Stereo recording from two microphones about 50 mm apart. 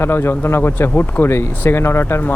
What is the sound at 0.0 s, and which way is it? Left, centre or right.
Speech, left.